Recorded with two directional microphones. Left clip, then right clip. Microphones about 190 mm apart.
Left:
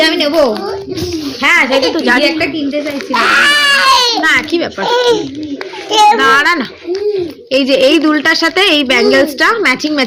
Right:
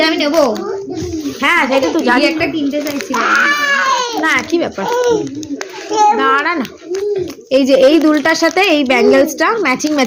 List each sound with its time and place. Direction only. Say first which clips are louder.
0.0 s a sound: left 2 dB; 20° left (ahead or behind)
1.4 s a woman's voice: left 3 dB; centre (ahead or behind)
2.1 s a woman's voice: left 2 dB; 15° left (ahead or behind)
3.1 s speech: left 4 dB; 50° left (ahead or behind)
4.2 s a woman's voice: left 3 dB; centre (ahead or behind)
4.9 s speech: left 4 dB; 45° left (ahead or behind)
6.1 s a woman's voice: left 4 dB; centre (ahead or behind)